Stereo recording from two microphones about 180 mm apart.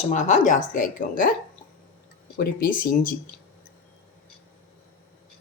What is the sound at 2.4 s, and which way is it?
Speech, 50° left (ahead or behind).